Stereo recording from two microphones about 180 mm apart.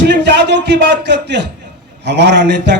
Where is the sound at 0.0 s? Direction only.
75° right (ahead or behind).